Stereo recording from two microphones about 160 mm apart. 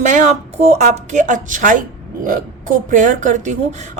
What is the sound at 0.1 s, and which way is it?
A woman's voice, 50° right (ahead or behind).